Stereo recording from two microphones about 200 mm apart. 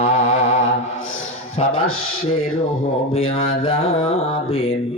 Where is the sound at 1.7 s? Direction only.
90° left.